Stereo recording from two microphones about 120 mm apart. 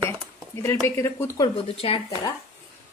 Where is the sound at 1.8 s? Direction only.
50° left (ahead or behind).